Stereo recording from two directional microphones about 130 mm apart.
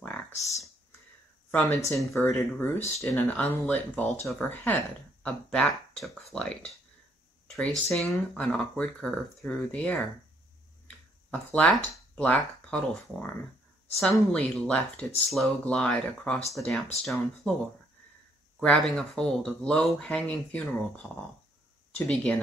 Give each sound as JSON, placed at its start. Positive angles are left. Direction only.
{"t": 1.5, "sound": "speech", "side_deg": 10}
{"t": 1.9, "sound": "speech", "side_deg": 0}
{"t": 2.2, "sound": "speech", "side_deg": 15}
{"t": 11.2, "sound": "speech", "side_deg": 10}
{"t": 18.6, "sound": "speech", "side_deg": 5}